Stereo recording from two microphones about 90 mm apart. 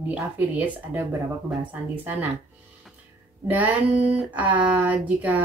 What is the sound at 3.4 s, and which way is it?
Speech, 15° right (ahead or behind).